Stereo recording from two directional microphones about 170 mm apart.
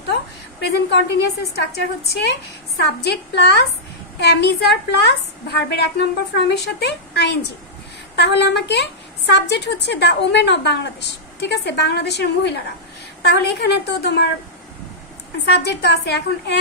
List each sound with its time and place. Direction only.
0.0 s a woman's voice: 80° left
15.4 s a woman's voice: 85° left